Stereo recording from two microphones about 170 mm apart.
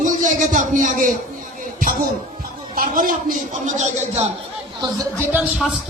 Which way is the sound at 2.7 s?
55° right (ahead or behind).